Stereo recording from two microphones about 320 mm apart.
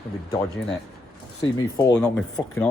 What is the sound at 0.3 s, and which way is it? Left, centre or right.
A man's voice, centre.